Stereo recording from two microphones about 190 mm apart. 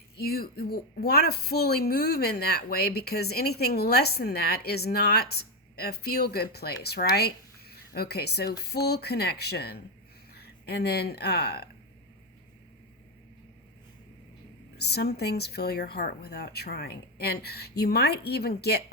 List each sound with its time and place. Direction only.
0.2 s a woman's voice: 55° left (ahead or behind)
14.8 s a woman's voice: 60° left (ahead or behind)